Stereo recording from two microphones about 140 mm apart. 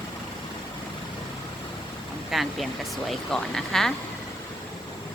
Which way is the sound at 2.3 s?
Centre (ahead or behind).